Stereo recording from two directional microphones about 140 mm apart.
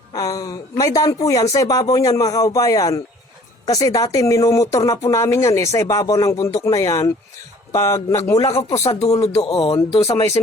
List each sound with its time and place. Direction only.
0.1 s speech: 25° left (ahead or behind)
8.7 s speech: 45° left (ahead or behind)